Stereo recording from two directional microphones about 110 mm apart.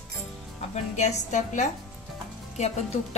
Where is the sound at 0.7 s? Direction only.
90° left.